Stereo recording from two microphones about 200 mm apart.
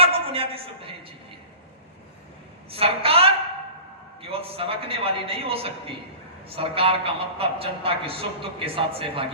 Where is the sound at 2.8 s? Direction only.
30° right (ahead or behind).